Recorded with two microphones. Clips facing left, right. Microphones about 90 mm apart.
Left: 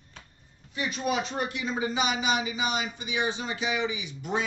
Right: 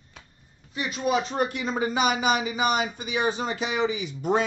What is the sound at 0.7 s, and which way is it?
Speech, 35° right (ahead or behind).